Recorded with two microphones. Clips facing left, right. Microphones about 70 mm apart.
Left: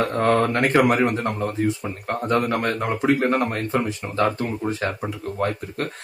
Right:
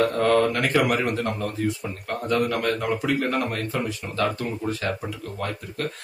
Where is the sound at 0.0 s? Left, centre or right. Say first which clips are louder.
Even; left.